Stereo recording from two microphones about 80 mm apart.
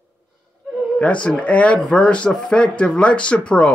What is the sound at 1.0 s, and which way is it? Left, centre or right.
Speech, centre.